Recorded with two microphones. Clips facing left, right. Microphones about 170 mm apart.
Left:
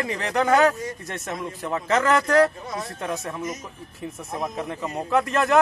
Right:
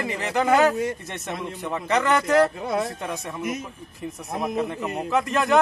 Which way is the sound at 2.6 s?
60° right (ahead or behind).